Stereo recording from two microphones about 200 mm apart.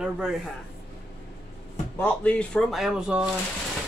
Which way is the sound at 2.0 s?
5° left (ahead or behind).